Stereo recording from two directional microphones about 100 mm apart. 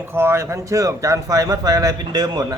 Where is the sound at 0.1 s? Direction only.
25° right (ahead or behind).